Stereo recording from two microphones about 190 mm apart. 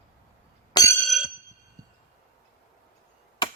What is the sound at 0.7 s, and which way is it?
Chink, 20° left (ahead or behind).